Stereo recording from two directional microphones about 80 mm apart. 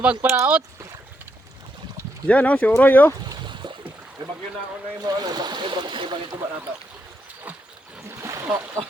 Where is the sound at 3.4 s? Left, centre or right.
Right.